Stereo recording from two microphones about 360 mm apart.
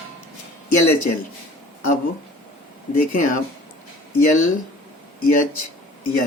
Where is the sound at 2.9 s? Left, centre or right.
Left.